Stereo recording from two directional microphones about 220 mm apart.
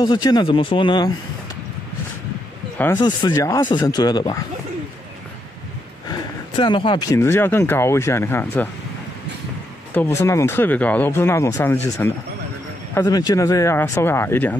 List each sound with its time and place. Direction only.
0.0 s speech: 20° left (ahead or behind)
3.0 s speech: 20° left (ahead or behind)
6.0 s speech: 20° left (ahead or behind)
9.9 s speech: 10° left (ahead or behind)